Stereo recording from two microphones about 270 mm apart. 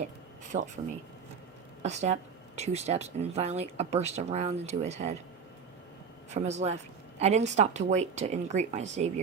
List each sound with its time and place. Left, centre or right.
1.8 s speech: right
6.3 s speech: right